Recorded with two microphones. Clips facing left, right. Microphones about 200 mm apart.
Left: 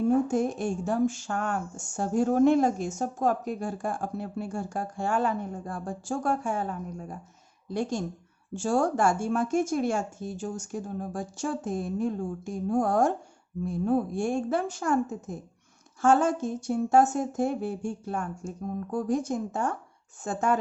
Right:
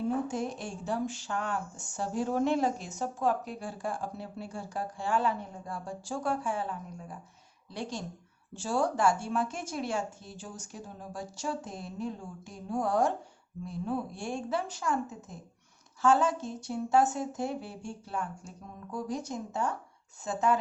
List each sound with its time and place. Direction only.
0.0 s speech: 45° left (ahead or behind)